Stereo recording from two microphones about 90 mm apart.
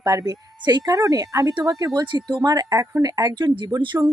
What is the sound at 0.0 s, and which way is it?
Speech, 40° right (ahead or behind).